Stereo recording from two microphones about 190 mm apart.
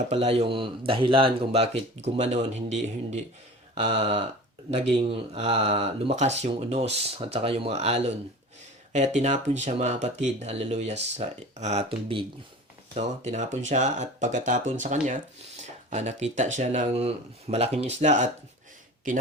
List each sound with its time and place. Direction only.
0.1 s speech: 30° right (ahead or behind)
3.8 s a sound: 25° right (ahead or behind)
5.0 s speech: 30° right (ahead or behind)